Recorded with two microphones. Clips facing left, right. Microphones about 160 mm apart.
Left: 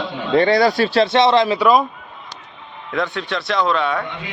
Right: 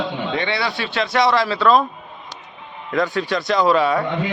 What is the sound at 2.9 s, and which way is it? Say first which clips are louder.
Speech: right 2 dB; 5° right (ahead or behind).